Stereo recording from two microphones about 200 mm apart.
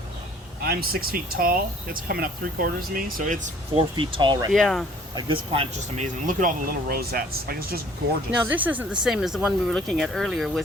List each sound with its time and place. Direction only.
0.6 s speech: 50° right (ahead or behind)
3.8 s speech: 25° right (ahead or behind)
4.5 s speech: centre (ahead or behind)
5.1 s speech: 25° right (ahead or behind); by 7.8 s 50° right (ahead or behind)
8.4 s speech: 10° right (ahead or behind)